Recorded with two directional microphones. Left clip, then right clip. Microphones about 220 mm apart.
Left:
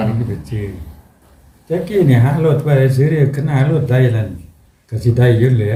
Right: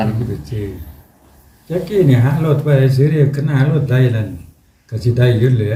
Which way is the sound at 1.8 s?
20° left (ahead or behind).